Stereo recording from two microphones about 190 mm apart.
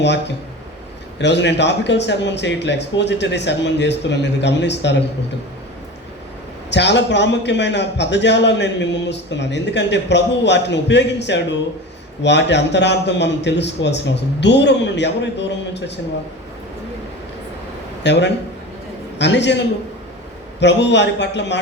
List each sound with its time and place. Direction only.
0.0 s a man's voice: 65° left (ahead or behind)
6.7 s a man's voice: 65° left (ahead or behind)
18.0 s a man's voice: 65° left (ahead or behind)